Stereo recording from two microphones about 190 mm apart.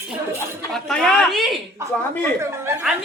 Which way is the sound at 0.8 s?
Centre (ahead or behind).